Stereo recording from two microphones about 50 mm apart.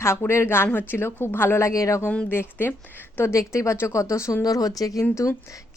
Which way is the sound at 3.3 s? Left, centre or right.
Left.